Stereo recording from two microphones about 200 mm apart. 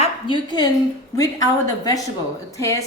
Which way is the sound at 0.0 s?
25° left (ahead or behind).